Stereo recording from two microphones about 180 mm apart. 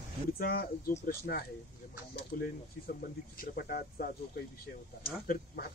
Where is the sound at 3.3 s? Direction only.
55° left (ahead or behind).